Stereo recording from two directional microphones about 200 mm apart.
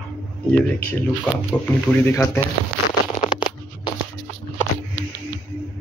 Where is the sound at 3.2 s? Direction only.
25° left (ahead or behind).